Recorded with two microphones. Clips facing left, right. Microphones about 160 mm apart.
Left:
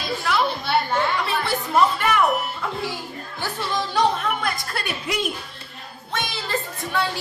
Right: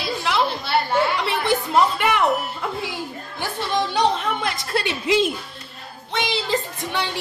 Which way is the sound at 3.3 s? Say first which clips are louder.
Right 3 dB; 20° right (ahead or behind).